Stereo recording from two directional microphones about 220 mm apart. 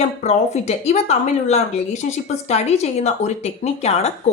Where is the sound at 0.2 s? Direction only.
30° left (ahead or behind).